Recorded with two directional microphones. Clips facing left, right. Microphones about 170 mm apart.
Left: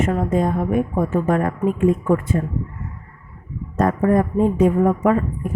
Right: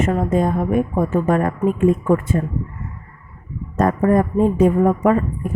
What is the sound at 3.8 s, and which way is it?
A woman's voice, 45° right (ahead or behind).